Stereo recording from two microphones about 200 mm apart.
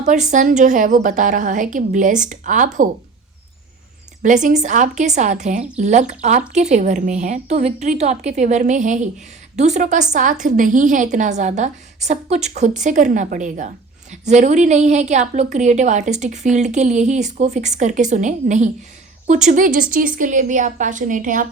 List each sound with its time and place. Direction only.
0.0 s a woman's voice: 35° right (ahead or behind)
4.2 s a woman's voice: 40° right (ahead or behind)